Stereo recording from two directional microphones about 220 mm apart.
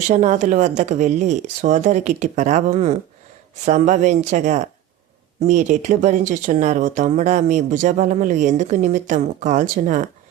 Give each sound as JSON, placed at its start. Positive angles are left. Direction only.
{"t": 0.1, "sound": "speech", "side_deg": -35}